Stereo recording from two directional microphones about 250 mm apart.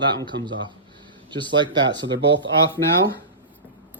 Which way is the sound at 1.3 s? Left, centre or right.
Centre.